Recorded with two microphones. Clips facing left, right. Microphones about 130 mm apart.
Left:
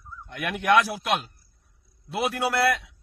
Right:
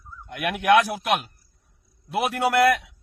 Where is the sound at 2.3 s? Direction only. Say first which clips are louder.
Right 5 dB; 50° right (ahead or behind).